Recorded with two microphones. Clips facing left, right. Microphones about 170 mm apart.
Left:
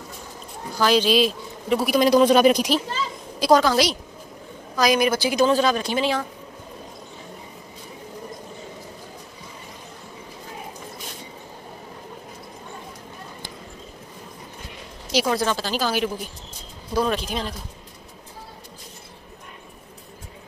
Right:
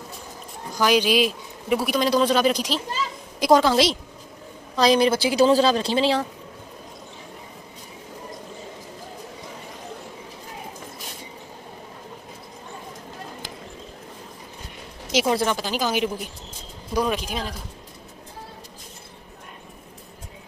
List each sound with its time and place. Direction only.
0.7 s speech: 15° right (ahead or behind)
1.9 s speech: 10° left (ahead or behind)
3.3 s a woman's voice: 20° right (ahead or behind)
15.0 s speech: 20° right (ahead or behind)